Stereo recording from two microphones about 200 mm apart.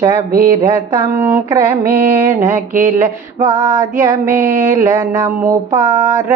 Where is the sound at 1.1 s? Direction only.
10° right (ahead or behind).